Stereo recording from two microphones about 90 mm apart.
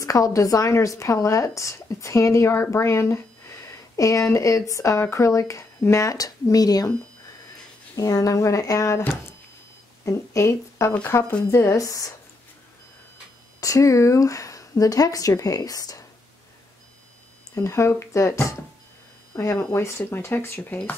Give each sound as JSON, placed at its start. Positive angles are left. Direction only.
{"t": 0.0, "sound": "speech", "side_deg": 40}
{"t": 7.9, "sound": "speech", "side_deg": 40}
{"t": 10.0, "sound": "speech", "side_deg": 35}
{"t": 13.6, "sound": "speech", "side_deg": 40}
{"t": 17.6, "sound": "speech", "side_deg": 30}